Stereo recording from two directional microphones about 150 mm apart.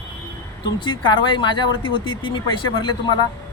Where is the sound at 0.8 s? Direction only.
35° left (ahead or behind).